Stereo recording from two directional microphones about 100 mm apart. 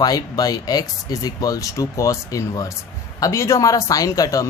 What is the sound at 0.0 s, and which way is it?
A man's voice, 40° left (ahead or behind).